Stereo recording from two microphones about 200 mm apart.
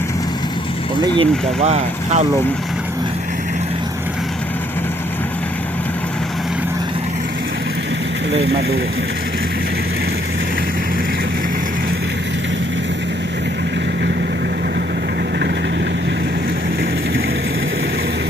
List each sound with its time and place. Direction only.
1.0 s speech: 25° right (ahead or behind)